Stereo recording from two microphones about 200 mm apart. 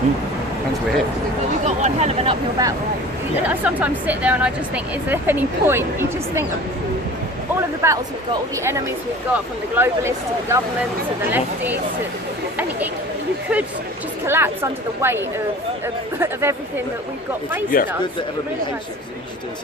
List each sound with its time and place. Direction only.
1.6 s speech: 35° right (ahead or behind)
2.6 s speech: 20° right (ahead or behind)
3.4 s speech: 10° right (ahead or behind)
7.8 s speech: 15° right (ahead or behind)
14.3 s speech: 10° right (ahead or behind)
16.2 s speech: 10° right (ahead or behind)
17.7 s speech: 45° left (ahead or behind)